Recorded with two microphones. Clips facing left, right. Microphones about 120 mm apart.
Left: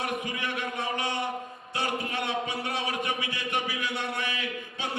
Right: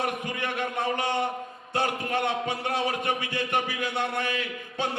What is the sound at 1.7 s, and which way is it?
A man's voice, 50° right (ahead or behind).